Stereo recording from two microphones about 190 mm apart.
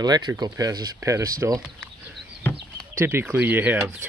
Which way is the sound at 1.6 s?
Centre (ahead or behind).